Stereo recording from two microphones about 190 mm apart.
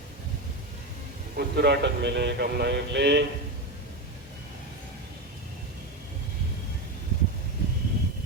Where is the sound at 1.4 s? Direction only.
60° right (ahead or behind).